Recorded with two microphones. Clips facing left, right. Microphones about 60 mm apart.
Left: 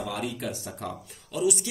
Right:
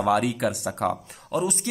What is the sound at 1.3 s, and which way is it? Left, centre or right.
Speech, right.